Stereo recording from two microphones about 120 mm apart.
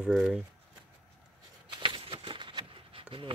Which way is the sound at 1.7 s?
40° right (ahead or behind).